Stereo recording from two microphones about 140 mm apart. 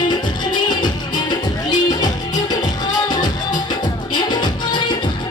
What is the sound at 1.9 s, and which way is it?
Music, 30° left (ahead or behind).